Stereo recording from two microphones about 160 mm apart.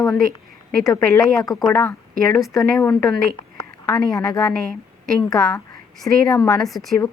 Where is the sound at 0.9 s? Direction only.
20° left (ahead or behind).